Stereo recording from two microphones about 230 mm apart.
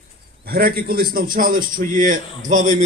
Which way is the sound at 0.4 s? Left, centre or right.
Right.